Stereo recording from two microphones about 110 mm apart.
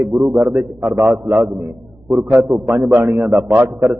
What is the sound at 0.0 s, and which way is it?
Speech, centre (ahead or behind).